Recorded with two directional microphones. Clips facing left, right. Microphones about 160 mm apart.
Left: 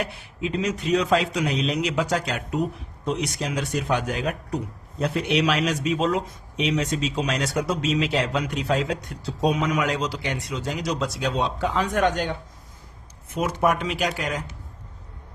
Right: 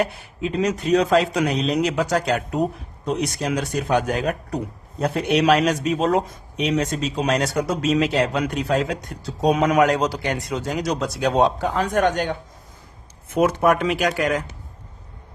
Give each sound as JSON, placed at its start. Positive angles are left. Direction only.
{"t": 0.0, "sound": "speech", "side_deg": -40}